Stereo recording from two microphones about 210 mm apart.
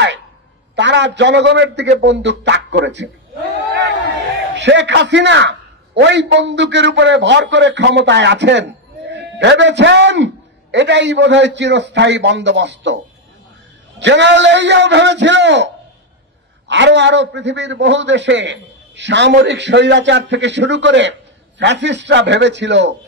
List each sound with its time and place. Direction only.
0.7 s a man's voice: 60° right (ahead or behind)
4.6 s a man's voice: 55° right (ahead or behind)